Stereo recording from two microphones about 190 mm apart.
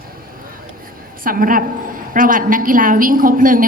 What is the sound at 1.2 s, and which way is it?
A woman's voice, 45° right (ahead or behind).